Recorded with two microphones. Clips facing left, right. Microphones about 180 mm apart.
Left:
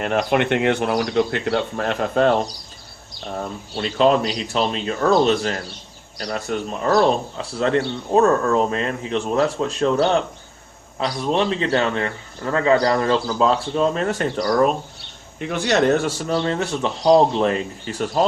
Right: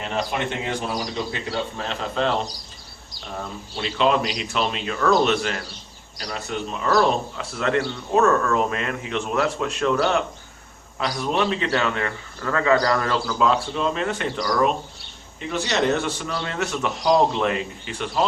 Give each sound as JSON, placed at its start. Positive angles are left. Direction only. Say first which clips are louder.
{"t": 0.0, "sound": "speech", "louder": "left 6 dB", "side_deg": 60}
{"t": 3.8, "sound": "a man's voice", "louder": "left 4 dB", "side_deg": 40}
{"t": 6.8, "sound": "a man's voice", "louder": "left 3 dB", "side_deg": 30}
{"t": 15.4, "sound": "a man's voice", "louder": "left 4 dB", "side_deg": 55}